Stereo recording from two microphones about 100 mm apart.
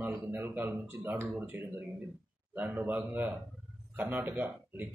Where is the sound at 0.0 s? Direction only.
25° right (ahead or behind).